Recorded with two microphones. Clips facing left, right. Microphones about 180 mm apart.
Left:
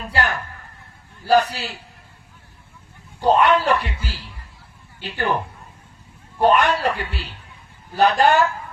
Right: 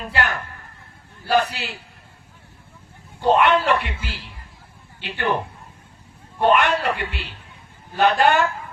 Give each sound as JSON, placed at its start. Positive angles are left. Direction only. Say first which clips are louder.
{"t": 0.1, "sound": "speech", "louder": "left 2 dB", "side_deg": 40}
{"t": 3.2, "sound": "speech", "louder": "left 1 dB", "side_deg": 40}
{"t": 6.4, "sound": "speech", "louder": "left 1 dB", "side_deg": 40}